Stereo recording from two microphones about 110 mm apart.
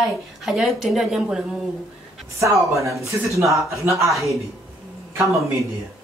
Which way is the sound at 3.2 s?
30° right (ahead or behind).